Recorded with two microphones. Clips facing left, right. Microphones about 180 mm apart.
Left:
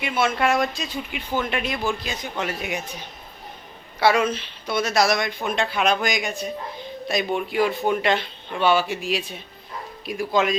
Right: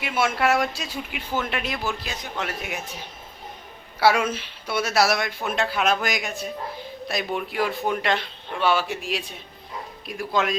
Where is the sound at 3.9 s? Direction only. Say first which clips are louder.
Left 1 dB; 5° right (ahead or behind).